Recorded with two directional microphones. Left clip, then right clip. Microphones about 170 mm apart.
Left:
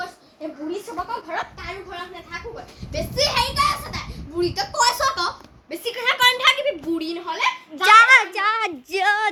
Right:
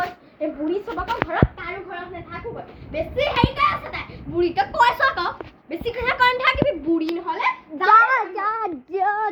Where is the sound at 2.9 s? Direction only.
15° right (ahead or behind).